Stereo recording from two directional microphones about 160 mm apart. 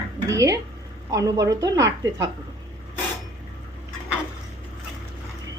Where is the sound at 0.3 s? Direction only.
20° right (ahead or behind).